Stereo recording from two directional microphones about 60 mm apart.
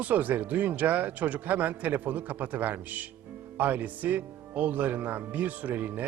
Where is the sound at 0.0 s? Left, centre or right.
Right.